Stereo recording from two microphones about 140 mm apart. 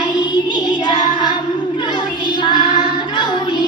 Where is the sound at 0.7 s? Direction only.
35° left (ahead or behind).